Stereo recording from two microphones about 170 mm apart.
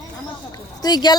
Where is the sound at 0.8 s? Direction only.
25° left (ahead or behind).